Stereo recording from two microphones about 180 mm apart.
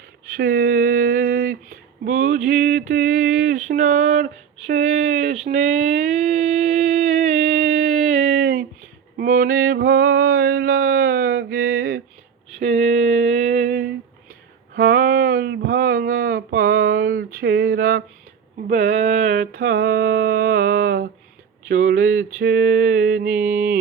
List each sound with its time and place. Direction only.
0.3 s speech: 55° right (ahead or behind)
5.5 s a sound: 40° right (ahead or behind)
6.9 s music: 40° right (ahead or behind)
8.1 s a sound: 45° right (ahead or behind)
12.5 s a sound: 40° right (ahead or behind); by 18.0 s 55° right (ahead or behind)
18.7 s mantra: 40° right (ahead or behind)
21.7 s speech: 50° right (ahead or behind)
22.4 s mantra: 55° right (ahead or behind)
23.3 s mantra: 10° right (ahead or behind)